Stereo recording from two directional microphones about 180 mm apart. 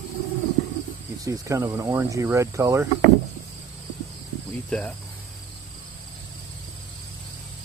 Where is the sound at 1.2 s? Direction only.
15° right (ahead or behind).